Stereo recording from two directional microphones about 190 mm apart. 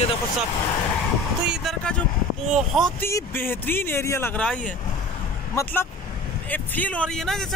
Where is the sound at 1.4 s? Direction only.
Centre (ahead or behind).